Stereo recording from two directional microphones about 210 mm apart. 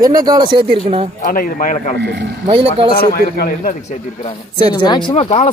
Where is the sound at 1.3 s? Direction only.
40° left (ahead or behind).